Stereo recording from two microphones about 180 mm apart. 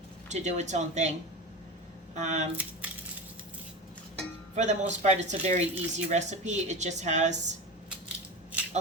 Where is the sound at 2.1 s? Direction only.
40° right (ahead or behind).